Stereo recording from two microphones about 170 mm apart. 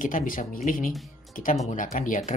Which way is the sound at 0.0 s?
50° left (ahead or behind).